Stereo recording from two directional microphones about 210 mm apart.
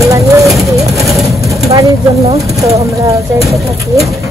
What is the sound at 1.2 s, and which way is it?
Vehicle, 15° right (ahead or behind).